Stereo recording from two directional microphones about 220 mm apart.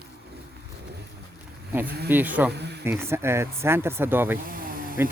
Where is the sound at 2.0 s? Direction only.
10° right (ahead or behind).